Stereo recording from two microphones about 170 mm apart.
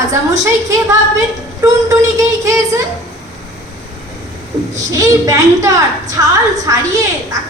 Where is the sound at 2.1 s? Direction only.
20° right (ahead or behind).